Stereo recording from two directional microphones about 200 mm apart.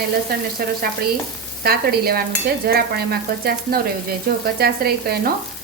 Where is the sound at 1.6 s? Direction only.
50° right (ahead or behind).